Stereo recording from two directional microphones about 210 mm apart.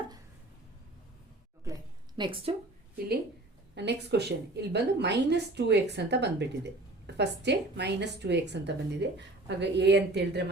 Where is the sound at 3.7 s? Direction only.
55° right (ahead or behind).